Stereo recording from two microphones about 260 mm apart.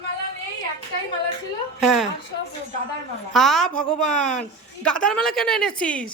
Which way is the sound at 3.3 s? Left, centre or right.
Centre.